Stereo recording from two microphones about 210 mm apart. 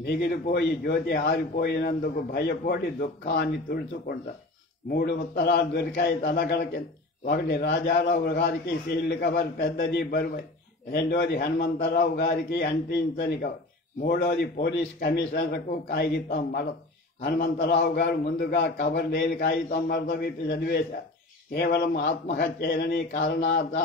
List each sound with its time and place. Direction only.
0.0 s a man's voice: 50° left (ahead or behind)